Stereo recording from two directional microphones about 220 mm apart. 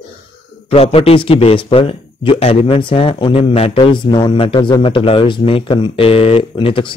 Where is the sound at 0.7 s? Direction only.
25° left (ahead or behind).